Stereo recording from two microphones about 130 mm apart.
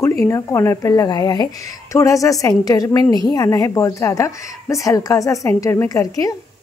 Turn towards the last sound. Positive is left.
turn(degrees=25)  # may be behind; listen again after turning